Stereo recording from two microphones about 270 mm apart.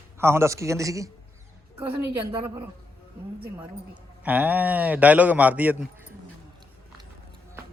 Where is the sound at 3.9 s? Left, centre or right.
Centre.